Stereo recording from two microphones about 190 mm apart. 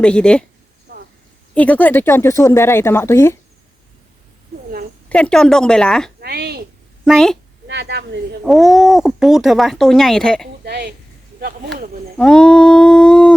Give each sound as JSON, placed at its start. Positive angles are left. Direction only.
{"t": 0.0, "sound": "speech", "side_deg": 5}
{"t": 1.5, "sound": "speech", "side_deg": 5}
{"t": 5.0, "sound": "speech", "side_deg": 5}
{"t": 6.1, "sound": "a woman's voice", "side_deg": -55}
{"t": 7.0, "sound": "a woman's voice", "side_deg": 0}
{"t": 7.7, "sound": "speech", "side_deg": -65}
{"t": 8.4, "sound": "speech", "side_deg": 0}
{"t": 10.7, "sound": "speech", "side_deg": -60}
{"t": 12.1, "sound": "speech", "side_deg": 5}